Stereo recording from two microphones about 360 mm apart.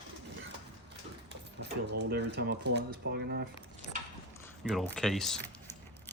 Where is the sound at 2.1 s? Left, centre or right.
Right.